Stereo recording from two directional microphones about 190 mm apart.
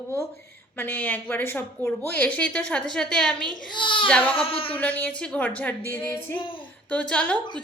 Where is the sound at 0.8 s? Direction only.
10° left (ahead or behind).